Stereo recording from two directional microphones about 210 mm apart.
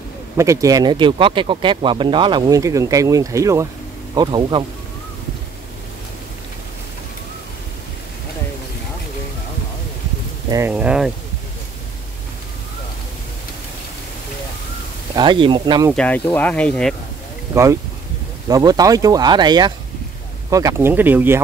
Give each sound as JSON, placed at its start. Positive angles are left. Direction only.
{"t": 0.4, "sound": "speech", "side_deg": -15}
{"t": 10.7, "sound": "speech", "side_deg": -5}
{"t": 15.1, "sound": "speech", "side_deg": -20}
{"t": 15.9, "sound": "speech", "side_deg": 5}
{"t": 18.5, "sound": "speech", "side_deg": -15}